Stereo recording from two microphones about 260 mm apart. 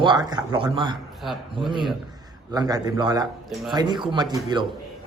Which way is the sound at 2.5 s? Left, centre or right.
Centre.